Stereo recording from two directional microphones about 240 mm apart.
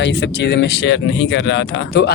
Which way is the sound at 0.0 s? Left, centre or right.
Left.